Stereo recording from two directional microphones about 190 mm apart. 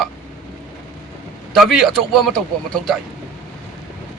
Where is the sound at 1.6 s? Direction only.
Centre (ahead or behind).